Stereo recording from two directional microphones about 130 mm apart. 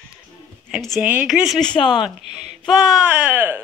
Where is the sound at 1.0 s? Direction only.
10° right (ahead or behind).